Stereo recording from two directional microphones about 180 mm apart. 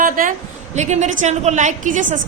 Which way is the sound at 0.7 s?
40° right (ahead or behind).